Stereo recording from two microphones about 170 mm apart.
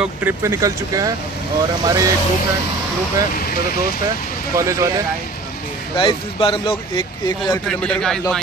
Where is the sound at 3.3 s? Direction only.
60° left (ahead or behind).